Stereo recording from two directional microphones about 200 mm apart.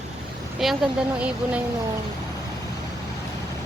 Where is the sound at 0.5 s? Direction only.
Centre (ahead or behind).